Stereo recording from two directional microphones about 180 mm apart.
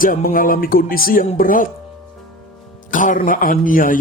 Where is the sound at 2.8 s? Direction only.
45° left (ahead or behind).